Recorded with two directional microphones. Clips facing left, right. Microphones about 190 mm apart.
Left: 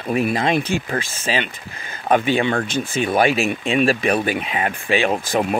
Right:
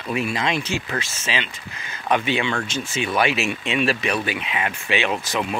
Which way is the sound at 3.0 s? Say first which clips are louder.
Left 4 dB; 45° left (ahead or behind).